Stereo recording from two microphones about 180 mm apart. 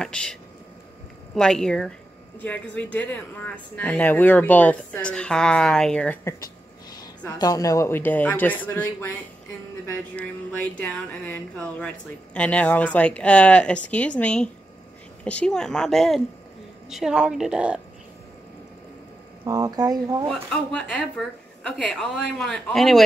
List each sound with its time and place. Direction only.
0.0 s speech: 5° left (ahead or behind)
10.1 s speech: 10° left (ahead or behind)
19.4 s speech: 20° right (ahead or behind)
20.2 s speech: 5° left (ahead or behind)